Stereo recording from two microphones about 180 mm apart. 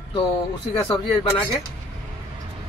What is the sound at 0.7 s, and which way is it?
Speech, 20° left (ahead or behind).